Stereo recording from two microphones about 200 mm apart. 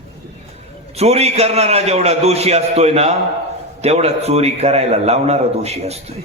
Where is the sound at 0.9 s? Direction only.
30° right (ahead or behind).